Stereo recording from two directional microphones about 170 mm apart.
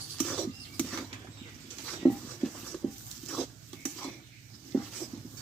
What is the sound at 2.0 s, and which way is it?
Writing, 5° left (ahead or behind).